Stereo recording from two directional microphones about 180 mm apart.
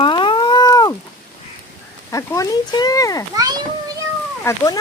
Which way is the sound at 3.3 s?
20° right (ahead or behind).